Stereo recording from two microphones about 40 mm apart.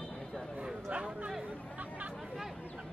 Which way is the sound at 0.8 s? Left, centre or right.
Right.